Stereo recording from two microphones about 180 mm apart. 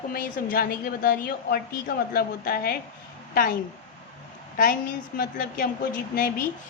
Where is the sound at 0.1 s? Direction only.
55° left (ahead or behind).